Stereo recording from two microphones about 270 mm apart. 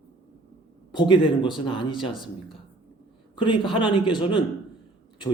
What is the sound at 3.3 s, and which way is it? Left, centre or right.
Speech, centre.